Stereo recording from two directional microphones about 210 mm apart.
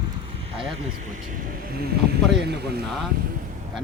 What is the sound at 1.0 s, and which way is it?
Speech, 40° right (ahead or behind).